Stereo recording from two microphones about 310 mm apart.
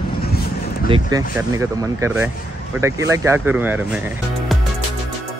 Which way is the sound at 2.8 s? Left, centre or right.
Centre.